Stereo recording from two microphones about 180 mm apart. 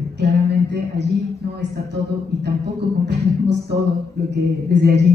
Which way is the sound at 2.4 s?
70° right (ahead or behind).